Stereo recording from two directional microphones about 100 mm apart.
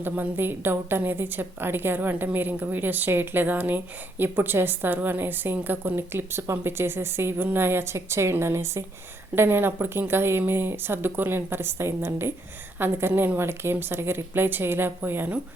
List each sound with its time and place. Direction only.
0.0 s a woman's voice: 20° right (ahead or behind)